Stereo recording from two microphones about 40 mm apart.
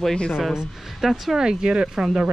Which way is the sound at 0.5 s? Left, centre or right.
Centre.